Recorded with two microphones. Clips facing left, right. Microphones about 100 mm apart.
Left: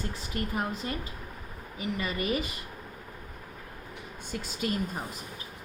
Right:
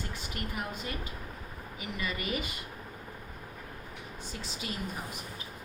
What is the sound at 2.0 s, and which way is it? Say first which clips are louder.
Speech: left 3 dB; 35° left (ahead or behind).